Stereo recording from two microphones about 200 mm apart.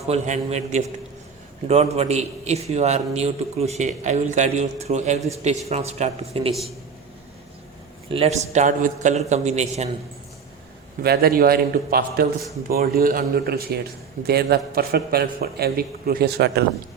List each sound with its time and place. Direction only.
0.1 s a man's voice: 35° right (ahead or behind)
8.1 s a man's voice: 30° right (ahead or behind)
11.0 s a man's voice: 50° right (ahead or behind)